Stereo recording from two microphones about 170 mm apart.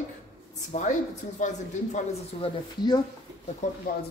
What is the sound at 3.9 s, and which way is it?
Speech, 60° left (ahead or behind).